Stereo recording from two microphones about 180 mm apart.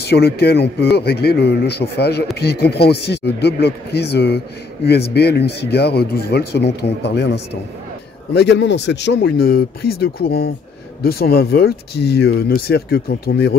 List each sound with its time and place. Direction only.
0.0 s speech: 65° left (ahead or behind)